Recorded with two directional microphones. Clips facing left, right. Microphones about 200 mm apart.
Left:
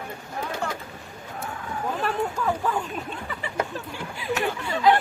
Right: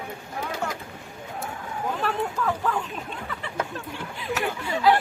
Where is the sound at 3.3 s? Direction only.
5° left (ahead or behind).